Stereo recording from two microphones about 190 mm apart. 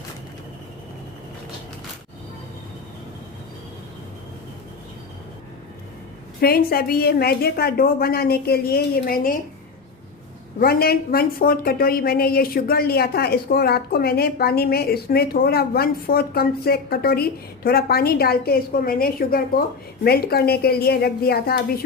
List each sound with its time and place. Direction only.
6.4 s speech: 50° left (ahead or behind)
10.6 s a woman's voice: 55° left (ahead or behind)